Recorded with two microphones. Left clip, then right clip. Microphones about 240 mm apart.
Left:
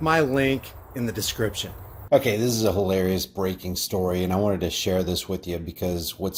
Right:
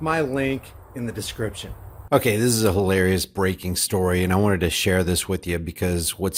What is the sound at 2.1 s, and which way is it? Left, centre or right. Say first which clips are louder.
Speech: right 1 dB; right.